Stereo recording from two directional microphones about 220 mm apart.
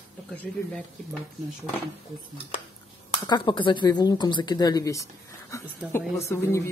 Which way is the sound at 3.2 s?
20° left (ahead or behind).